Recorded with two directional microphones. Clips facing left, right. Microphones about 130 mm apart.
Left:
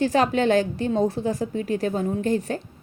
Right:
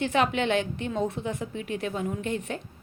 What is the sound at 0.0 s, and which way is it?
A woman's voice, 35° left (ahead or behind).